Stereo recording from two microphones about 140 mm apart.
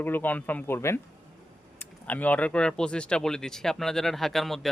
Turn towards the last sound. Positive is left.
turn(degrees=0)  # may be behind; listen again after turning